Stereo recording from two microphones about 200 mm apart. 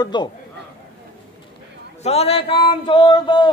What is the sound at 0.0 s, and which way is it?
Speech, 20° left (ahead or behind).